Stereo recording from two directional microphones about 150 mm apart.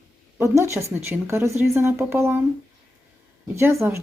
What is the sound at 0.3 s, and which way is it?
Speech, 20° right (ahead or behind).